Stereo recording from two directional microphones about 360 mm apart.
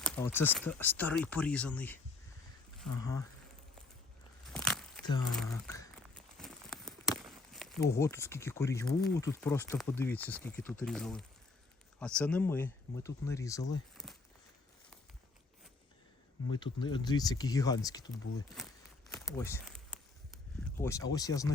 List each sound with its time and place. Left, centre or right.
0.0 s speech: centre
3.0 s speech: centre
4.5 s a sound: centre
7.5 s crumpling: centre
7.9 s speech: centre
16.5 s speech: centre
18.5 s crumpling: centre
20.7 s speech: centre